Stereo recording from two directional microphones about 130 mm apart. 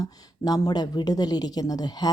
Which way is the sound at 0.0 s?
30° left (ahead or behind).